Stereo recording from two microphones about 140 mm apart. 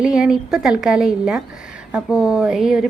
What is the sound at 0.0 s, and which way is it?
A woman's voice, 5° right (ahead or behind).